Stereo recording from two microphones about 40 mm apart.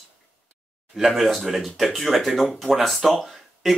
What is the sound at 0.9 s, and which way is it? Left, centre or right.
Speech, centre.